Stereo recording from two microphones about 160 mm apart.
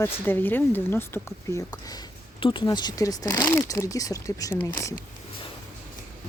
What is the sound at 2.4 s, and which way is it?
Speech, 30° left (ahead or behind).